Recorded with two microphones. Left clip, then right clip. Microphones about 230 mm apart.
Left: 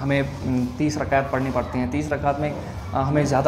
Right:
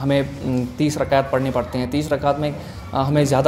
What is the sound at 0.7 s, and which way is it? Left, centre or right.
Speech, right.